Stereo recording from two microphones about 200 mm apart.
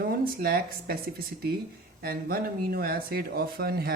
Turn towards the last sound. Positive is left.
turn(degrees=-50)  # may be behind; listen again after turning